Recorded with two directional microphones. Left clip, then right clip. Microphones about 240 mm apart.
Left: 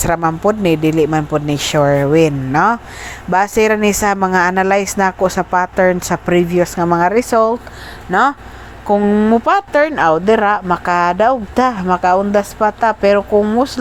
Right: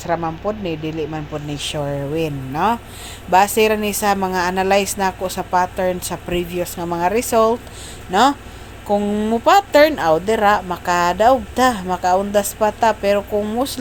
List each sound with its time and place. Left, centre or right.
0.0 s a woman's voice: left; by 13.7 s centre